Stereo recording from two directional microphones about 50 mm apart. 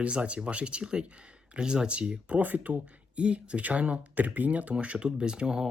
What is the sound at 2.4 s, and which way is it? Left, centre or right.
Speech, right.